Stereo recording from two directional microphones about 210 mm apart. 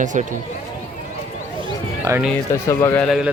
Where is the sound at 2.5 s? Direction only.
15° left (ahead or behind).